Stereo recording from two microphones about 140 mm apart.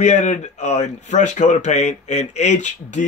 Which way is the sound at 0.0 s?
60° left (ahead or behind).